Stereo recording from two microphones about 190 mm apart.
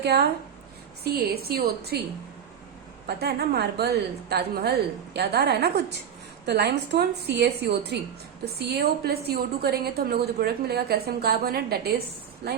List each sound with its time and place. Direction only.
0.0 s a woman's voice: 60° right (ahead or behind)
3.1 s a woman's voice: 55° right (ahead or behind)